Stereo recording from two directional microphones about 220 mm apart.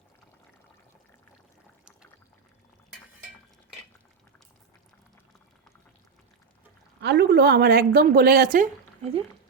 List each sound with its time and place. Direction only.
7.0 s a woman's voice: 50° right (ahead or behind); by 9.2 s 30° right (ahead or behind)